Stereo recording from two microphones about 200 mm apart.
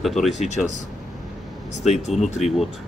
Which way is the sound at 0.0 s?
Centre (ahead or behind).